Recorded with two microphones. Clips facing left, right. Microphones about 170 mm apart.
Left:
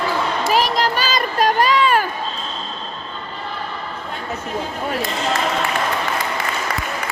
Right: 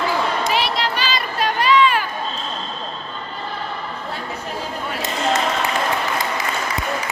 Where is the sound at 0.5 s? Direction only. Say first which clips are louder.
Left 3 dB; 45° left (ahead or behind).